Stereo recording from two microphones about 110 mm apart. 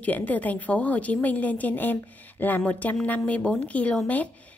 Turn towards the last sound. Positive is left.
turn(degrees=10)  # may be behind; listen again after turning